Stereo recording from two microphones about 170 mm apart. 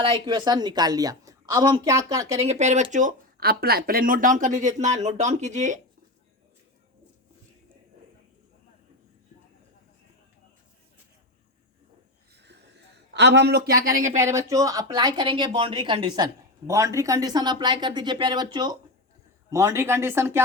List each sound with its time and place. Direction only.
0.0 s speech: 30° right (ahead or behind)
2.4 s speech: 40° right (ahead or behind)
12.3 s wheeze: 85° right
13.1 s speech: 90° right; by 14.2 s 50° right (ahead or behind)
14.2 s speech: 15° right (ahead or behind)